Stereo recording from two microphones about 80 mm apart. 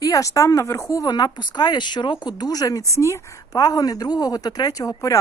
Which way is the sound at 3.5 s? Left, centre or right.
Left.